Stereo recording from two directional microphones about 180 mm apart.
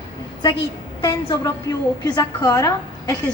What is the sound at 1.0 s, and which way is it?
A woman's voice, 20° left (ahead or behind).